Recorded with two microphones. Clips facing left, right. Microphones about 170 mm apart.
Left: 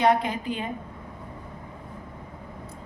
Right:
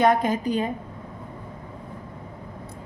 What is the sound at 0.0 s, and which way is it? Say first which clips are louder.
Speech: right 2 dB; 45° right (ahead or behind).